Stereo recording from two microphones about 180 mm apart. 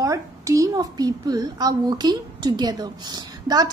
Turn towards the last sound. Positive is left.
turn(degrees=-20)  # may be behind; listen again after turning